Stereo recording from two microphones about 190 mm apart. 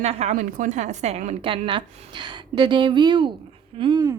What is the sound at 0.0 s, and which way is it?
A woman's voice, 35° right (ahead or behind).